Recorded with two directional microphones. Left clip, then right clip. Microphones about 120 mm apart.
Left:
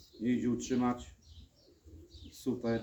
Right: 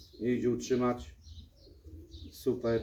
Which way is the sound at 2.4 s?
20° left (ahead or behind).